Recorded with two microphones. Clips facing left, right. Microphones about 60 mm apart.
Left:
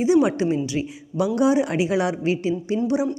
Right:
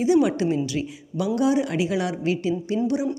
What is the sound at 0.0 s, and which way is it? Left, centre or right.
A woman's voice, centre.